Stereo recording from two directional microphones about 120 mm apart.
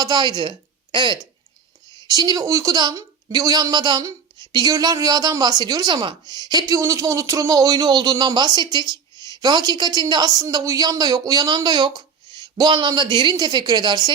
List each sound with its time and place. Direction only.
0.0 s a woman's voice: 35° right (ahead or behind)